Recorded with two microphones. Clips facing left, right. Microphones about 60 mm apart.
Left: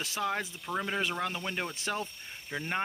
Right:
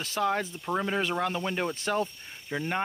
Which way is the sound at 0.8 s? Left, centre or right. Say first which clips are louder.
Right 3 dB; centre.